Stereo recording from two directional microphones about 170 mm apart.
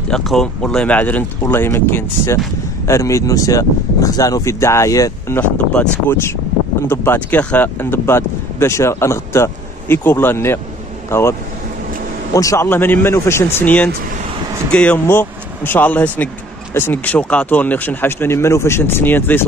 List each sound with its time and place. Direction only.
0.1 s speech: centre (ahead or behind)
12.4 s speech: 15° left (ahead or behind)